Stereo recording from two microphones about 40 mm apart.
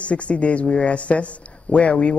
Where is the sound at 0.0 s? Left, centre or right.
Left.